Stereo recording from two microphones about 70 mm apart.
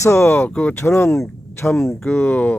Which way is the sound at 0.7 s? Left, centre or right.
Left.